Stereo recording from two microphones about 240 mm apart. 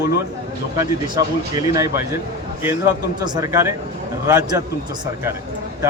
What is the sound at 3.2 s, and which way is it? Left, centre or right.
Speech, centre.